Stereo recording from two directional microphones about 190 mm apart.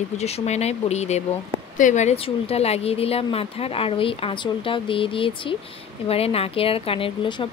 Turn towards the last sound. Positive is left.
turn(degrees=30)  # may be behind; listen again after turning